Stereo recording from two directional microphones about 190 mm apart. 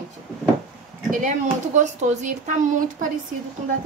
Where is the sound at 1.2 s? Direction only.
40° right (ahead or behind).